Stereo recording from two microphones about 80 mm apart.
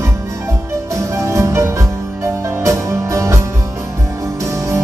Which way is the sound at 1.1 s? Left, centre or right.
Right.